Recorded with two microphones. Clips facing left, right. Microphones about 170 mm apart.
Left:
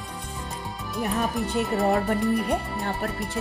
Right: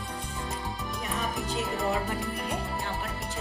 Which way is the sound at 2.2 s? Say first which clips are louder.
Left 9 dB; centre (ahead or behind).